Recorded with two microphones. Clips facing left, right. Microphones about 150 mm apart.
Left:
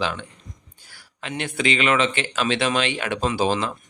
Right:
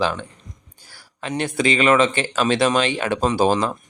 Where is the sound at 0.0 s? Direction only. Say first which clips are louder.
Right 4 dB; 40° right (ahead or behind).